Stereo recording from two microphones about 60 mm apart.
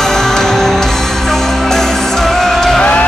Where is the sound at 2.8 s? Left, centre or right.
Left.